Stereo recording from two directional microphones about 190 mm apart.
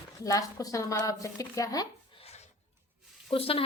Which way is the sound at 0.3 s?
15° left (ahead or behind).